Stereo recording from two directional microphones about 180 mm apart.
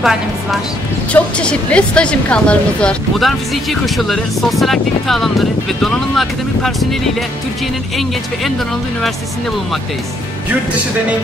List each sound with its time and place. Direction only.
0.0 s a woman's voice: centre (ahead or behind)